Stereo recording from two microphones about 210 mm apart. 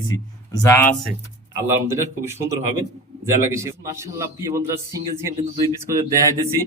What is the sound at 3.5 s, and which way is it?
Speech, 15° right (ahead or behind).